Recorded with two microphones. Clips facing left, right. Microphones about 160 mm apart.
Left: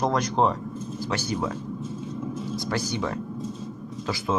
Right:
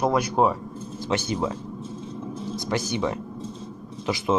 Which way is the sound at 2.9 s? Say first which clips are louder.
Right 2 dB; 15° right (ahead or behind).